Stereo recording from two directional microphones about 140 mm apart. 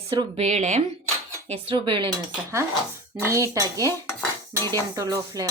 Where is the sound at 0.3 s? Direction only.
55° right (ahead or behind).